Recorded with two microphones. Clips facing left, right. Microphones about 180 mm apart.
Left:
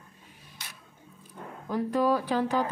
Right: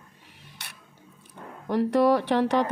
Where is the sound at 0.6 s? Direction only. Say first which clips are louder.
Right 1 dB; 65° right (ahead or behind).